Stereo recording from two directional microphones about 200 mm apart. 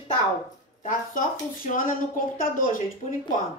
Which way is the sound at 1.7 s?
40° left (ahead or behind).